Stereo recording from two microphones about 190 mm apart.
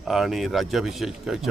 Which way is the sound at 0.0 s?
Centre (ahead or behind).